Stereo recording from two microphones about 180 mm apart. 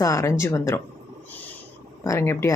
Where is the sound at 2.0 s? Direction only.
15° left (ahead or behind).